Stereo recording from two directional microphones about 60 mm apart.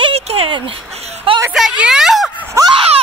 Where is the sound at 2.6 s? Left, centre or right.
Right.